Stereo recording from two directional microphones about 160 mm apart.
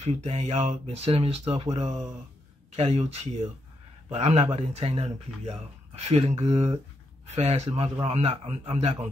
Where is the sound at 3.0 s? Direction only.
40° right (ahead or behind).